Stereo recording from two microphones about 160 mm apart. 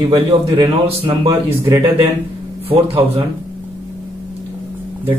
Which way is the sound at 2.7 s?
35° right (ahead or behind).